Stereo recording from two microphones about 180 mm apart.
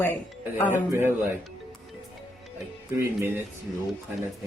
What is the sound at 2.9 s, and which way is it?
Speech, 15° right (ahead or behind).